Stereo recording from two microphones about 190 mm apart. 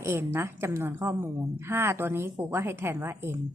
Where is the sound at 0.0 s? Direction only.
15° right (ahead or behind).